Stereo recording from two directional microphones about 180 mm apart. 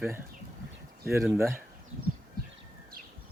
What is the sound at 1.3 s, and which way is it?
Speech, 15° right (ahead or behind).